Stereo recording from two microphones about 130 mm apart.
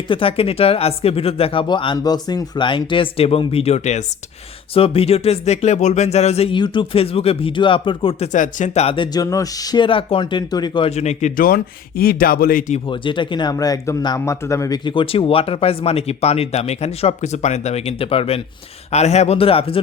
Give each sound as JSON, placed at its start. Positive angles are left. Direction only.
{"t": 0.1, "sound": "speech", "side_deg": 45}
{"t": 4.7, "sound": "speech", "side_deg": 45}
{"t": 6.5, "sound": "speech", "side_deg": 40}
{"t": 8.3, "sound": "speech", "side_deg": 75}
{"t": 9.1, "sound": "speech", "side_deg": 25}
{"t": 10.8, "sound": "speech", "side_deg": 60}
{"t": 12.2, "sound": "speech", "side_deg": 90}
{"t": 12.9, "sound": "speech", "side_deg": 40}
{"t": 14.8, "sound": "speech", "side_deg": 45}
{"t": 18.9, "sound": "speech", "side_deg": 60}